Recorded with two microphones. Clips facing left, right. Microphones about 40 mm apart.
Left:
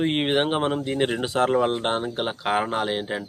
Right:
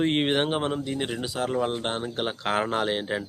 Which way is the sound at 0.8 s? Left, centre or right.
Left.